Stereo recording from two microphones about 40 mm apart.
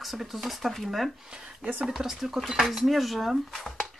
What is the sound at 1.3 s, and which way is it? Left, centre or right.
Speech, centre.